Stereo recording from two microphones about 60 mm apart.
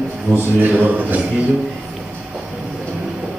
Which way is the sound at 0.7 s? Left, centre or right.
Right.